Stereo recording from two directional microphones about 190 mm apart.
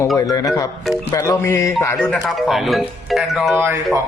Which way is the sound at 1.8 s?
10° left (ahead or behind).